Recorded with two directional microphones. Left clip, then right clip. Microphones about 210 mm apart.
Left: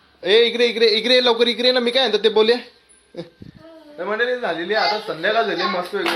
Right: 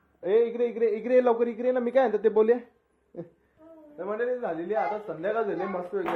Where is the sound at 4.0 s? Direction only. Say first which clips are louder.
Left 8 dB; 5° left (ahead or behind).